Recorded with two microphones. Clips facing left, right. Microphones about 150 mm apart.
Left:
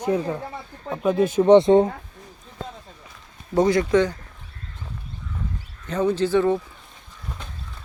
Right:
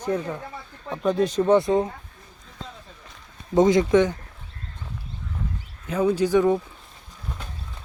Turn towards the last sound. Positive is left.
turn(degrees=-15)  # may be behind; listen again after turning